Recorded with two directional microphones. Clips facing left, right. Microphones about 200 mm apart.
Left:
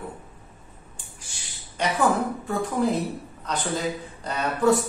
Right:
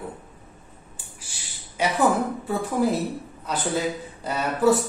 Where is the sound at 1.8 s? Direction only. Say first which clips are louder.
Right 1 dB; 5° right (ahead or behind).